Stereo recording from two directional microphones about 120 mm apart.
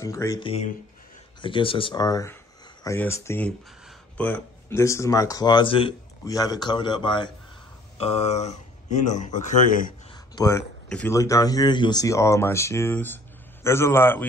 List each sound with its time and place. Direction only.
0.0 s speech: 25° left (ahead or behind)
0.4 s speech: 50° left (ahead or behind)
2.0 s a man's voice: 30° left (ahead or behind)
3.0 s speech: 20° left (ahead or behind); by 5.9 s 45° left (ahead or behind)
6.2 s a man's voice: 30° left (ahead or behind)
8.0 s speech: 60° left (ahead or behind)
9.0 s a man's voice: 90° left
10.1 s a sound: 30° left (ahead or behind)
11.1 s speech: 30° left (ahead or behind)